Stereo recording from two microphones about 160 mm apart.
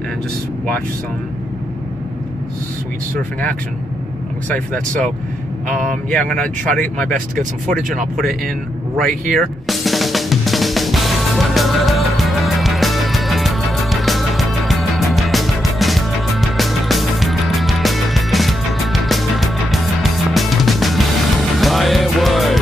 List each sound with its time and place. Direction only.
4.5 s speech: 5° left (ahead or behind)
7.3 s speech: 55° right (ahead or behind)
9.4 s drum: centre (ahead or behind)